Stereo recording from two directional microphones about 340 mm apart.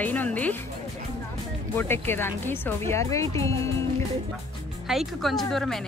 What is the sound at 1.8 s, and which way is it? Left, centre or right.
Speech, centre.